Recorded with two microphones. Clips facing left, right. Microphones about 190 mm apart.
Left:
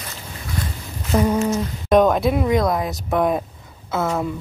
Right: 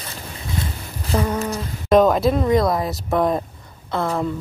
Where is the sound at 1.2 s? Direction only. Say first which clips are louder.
Left 5 dB; 15° left (ahead or behind).